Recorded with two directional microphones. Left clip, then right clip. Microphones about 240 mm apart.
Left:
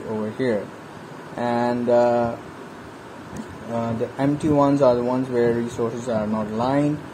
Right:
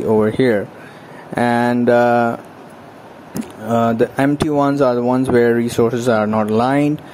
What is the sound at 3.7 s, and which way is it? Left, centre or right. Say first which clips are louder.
Speech: right 10 dB; right.